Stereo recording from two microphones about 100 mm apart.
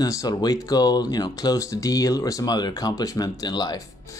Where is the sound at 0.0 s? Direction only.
40° left (ahead or behind).